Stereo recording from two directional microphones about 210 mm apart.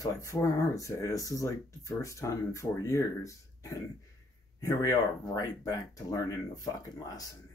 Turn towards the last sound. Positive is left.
turn(degrees=15)  # may be behind; listen again after turning